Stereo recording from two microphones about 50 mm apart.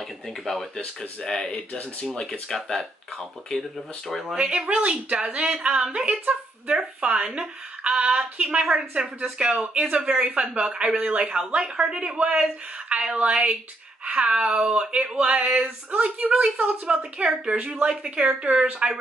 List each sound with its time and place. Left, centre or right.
1.2 s speech: centre
1.7 s speech: left
2.4 s speech: centre
4.4 s a woman's voice: right